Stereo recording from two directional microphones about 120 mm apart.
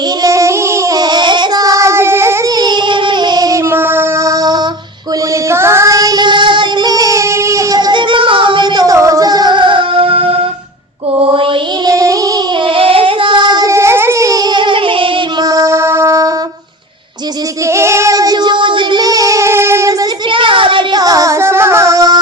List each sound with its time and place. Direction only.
0.2 s child singing: 25° right (ahead or behind)
2.6 s yodeling: 40° right (ahead or behind)
3.7 s a sound: 20° right (ahead or behind)
5.5 s child singing: 20° right (ahead or behind); by 10.3 s 50° right (ahead or behind)
11.2 s mantra: 50° right (ahead or behind)
11.9 s a sound: 30° right (ahead or behind)
12.6 s female singing: 50° right (ahead or behind)
13.7 s music: 25° right (ahead or behind); by 15.4 s 45° right (ahead or behind)
15.4 s shofar: 25° right (ahead or behind)
17.7 s child singing: 25° right (ahead or behind)
20.3 s a sound: 45° right (ahead or behind)
21.0 s music: 30° right (ahead or behind)